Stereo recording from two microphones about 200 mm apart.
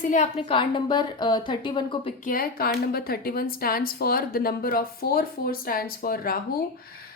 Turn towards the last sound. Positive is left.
turn(degrees=45)  # may be behind; listen again after turning